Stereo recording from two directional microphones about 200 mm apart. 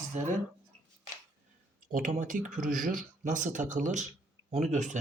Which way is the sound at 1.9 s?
40° right (ahead or behind).